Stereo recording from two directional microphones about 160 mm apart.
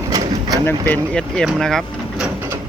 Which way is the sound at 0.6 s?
10° left (ahead or behind).